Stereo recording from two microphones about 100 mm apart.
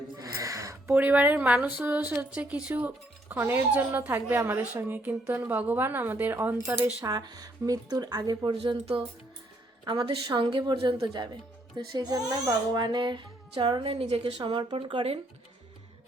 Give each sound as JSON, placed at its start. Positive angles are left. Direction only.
{"t": 0.2, "sound": "a sound", "side_deg": -30}
{"t": 0.9, "sound": "a woman's voice", "side_deg": -15}
{"t": 7.0, "sound": "speech", "side_deg": -40}
{"t": 8.4, "sound": "speech", "side_deg": -50}
{"t": 9.8, "sound": "speech", "side_deg": -50}
{"t": 10.8, "sound": "speech", "side_deg": -70}
{"t": 11.0, "sound": "speech", "side_deg": -50}
{"t": 14.0, "sound": "a woman's voice", "side_deg": -80}
{"t": 14.3, "sound": "speech", "side_deg": -55}